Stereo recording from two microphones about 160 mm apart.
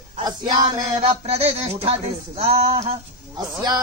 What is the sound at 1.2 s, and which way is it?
Speech, 40° right (ahead or behind).